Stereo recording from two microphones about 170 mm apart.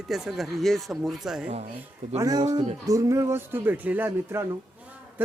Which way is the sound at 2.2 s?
20° right (ahead or behind).